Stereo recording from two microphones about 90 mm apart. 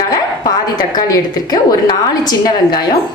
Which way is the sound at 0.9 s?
45° left (ahead or behind).